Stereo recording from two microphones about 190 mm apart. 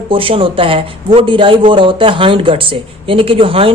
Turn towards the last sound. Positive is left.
turn(degrees=-30)  # may be behind; listen again after turning